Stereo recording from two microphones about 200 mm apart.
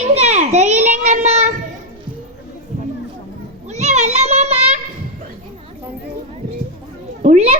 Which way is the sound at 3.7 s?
35° right (ahead or behind).